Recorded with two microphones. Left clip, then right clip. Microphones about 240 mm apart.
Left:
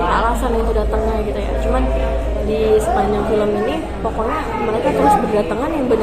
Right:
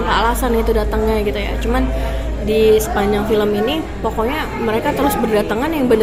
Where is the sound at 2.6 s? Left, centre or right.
Right.